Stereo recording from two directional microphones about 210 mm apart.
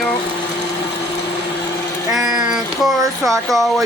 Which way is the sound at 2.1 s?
Centre (ahead or behind).